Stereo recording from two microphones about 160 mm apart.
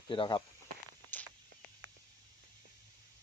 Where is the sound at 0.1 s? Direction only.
30° left (ahead or behind).